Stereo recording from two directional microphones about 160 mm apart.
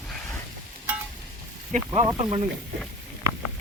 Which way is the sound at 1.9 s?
25° right (ahead or behind).